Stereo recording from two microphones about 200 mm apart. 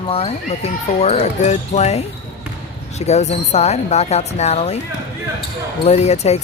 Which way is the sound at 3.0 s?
35° left (ahead or behind).